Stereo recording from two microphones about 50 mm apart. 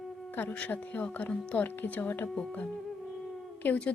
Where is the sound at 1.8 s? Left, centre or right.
Left.